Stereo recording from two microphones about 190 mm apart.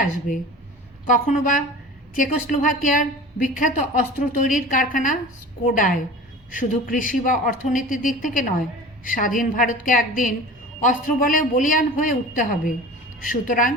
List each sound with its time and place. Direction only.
0.3 s a woman's voice: 45° left (ahead or behind)